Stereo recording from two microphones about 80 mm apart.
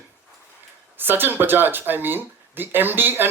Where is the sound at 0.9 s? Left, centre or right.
Right.